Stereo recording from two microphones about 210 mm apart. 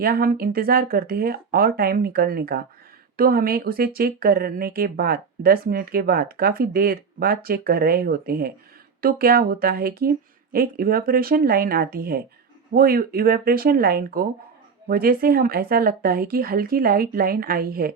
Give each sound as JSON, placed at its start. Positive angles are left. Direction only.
{"t": 0.0, "sound": "speech", "side_deg": -45}